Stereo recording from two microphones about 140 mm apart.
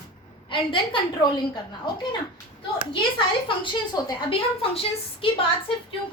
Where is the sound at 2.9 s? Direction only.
35° left (ahead or behind).